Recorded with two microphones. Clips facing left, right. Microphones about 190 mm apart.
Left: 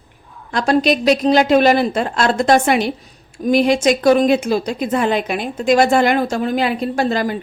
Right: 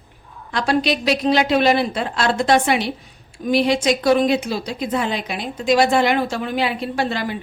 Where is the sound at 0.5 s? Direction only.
45° left (ahead or behind).